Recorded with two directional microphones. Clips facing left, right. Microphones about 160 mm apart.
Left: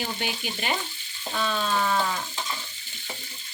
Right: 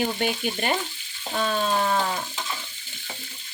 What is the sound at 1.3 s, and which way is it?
Stir, 40° right (ahead or behind).